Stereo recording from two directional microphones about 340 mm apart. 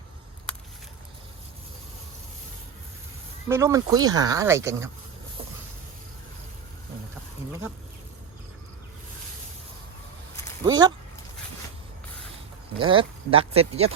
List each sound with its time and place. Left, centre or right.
3.5 s speech: centre
10.6 s speech: centre
12.8 s speech: centre